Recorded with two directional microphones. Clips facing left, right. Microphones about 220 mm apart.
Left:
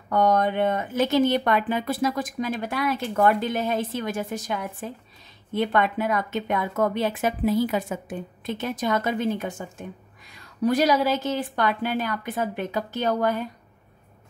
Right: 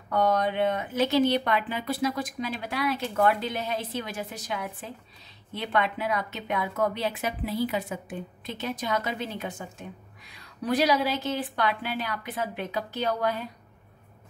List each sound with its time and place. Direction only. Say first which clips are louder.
0.1 s a woman's voice: left 3 dB; 45° left (ahead or behind)